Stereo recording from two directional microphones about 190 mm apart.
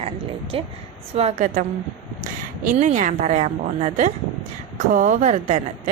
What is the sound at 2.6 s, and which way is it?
A woman's voice, 40° right (ahead or behind).